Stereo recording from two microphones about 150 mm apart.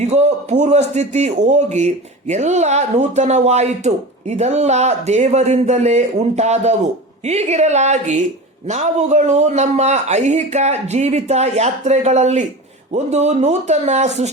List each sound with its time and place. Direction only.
0.0 s a man's voice: 45° right (ahead or behind)